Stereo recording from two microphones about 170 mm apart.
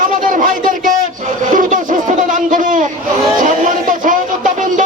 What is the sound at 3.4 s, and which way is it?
Music, 50° right (ahead or behind).